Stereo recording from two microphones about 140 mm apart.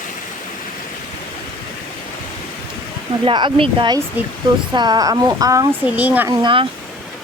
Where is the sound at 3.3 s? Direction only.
35° right (ahead or behind).